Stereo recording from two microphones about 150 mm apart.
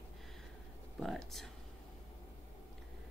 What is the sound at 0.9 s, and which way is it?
Speech, centre (ahead or behind).